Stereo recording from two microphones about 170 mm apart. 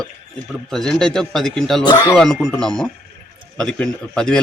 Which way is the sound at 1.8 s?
25° left (ahead or behind).